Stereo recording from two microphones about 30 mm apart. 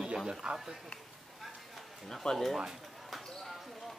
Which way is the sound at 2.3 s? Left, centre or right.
Left.